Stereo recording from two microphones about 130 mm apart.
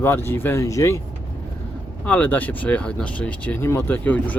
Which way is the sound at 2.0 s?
10° left (ahead or behind).